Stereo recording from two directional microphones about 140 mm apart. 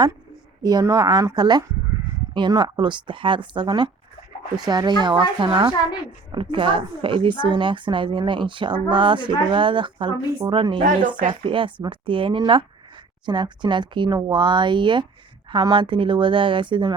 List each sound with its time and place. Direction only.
0.6 s a woman's voice: 25° right (ahead or behind)